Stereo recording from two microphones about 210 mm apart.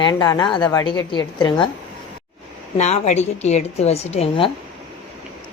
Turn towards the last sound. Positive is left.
turn(degrees=25)  # may be behind; listen again after turning